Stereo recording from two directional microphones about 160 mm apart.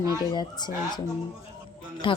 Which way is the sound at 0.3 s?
25° left (ahead or behind).